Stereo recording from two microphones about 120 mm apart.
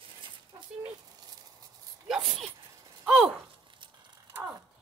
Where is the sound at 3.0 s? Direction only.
5° right (ahead or behind).